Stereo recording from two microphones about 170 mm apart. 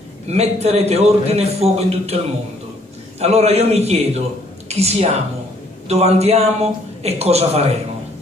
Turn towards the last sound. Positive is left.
turn(degrees=-40)  # may be behind; listen again after turning